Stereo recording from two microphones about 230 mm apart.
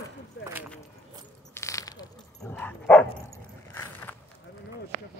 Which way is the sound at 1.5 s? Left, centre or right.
Centre.